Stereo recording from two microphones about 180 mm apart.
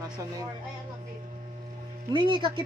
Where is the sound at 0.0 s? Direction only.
20° right (ahead or behind).